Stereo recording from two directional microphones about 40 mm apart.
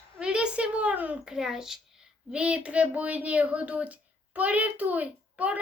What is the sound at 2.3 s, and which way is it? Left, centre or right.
A woman's voice, right.